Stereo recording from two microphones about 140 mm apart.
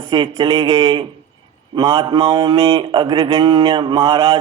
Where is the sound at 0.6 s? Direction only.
45° right (ahead or behind).